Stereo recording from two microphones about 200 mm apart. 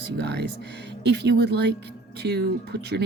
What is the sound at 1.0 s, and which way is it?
Speech, 55° right (ahead or behind).